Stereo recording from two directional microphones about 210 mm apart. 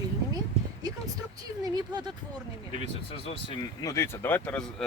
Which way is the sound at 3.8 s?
15° left (ahead or behind).